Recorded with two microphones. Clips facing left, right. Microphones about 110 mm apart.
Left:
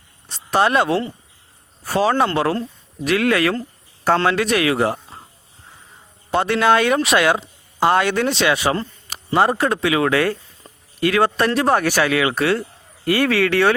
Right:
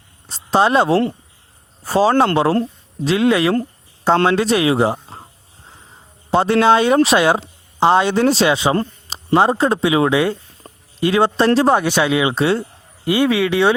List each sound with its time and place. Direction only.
0.3 s speech: 30° right (ahead or behind)
6.3 s speech: 30° right (ahead or behind)
10.6 s a sound: 50° right (ahead or behind)
11.0 s speech: 25° right (ahead or behind)